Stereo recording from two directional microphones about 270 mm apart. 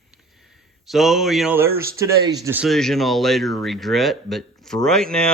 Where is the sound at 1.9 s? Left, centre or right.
Centre.